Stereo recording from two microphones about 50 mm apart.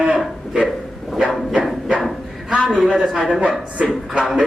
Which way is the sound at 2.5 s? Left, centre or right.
Centre.